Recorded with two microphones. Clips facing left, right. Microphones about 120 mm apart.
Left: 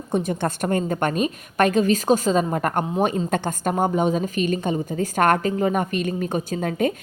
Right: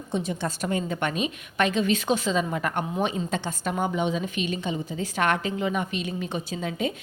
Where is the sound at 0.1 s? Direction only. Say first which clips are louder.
Left 5 dB; 50° left (ahead or behind).